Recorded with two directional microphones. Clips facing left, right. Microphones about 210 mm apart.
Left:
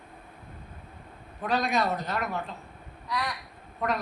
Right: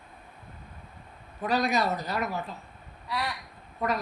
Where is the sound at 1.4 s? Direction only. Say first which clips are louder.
Right 1 dB; centre (ahead or behind).